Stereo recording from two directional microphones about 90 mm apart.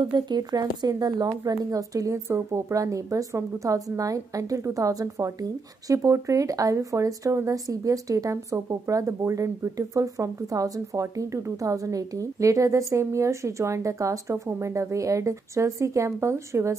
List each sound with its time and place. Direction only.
0.1 s speech: 50° right (ahead or behind); by 16.7 s 30° right (ahead or behind)